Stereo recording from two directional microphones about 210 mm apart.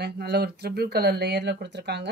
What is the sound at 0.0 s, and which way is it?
Speech, 50° right (ahead or behind).